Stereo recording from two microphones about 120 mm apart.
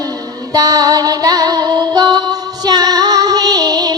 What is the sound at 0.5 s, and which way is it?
Music, 30° right (ahead or behind).